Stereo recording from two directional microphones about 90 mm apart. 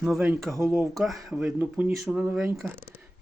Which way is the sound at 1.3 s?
15° right (ahead or behind).